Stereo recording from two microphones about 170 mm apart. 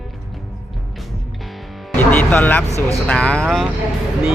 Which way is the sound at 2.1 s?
10° left (ahead or behind).